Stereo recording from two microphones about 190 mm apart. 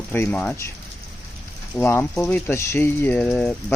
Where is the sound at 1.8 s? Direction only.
10° left (ahead or behind).